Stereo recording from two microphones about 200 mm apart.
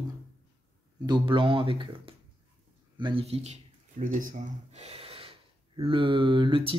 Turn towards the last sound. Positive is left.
turn(degrees=-25)  # may be behind; listen again after turning